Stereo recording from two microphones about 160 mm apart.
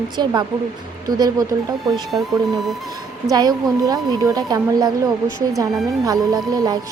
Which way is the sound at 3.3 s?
25° right (ahead or behind).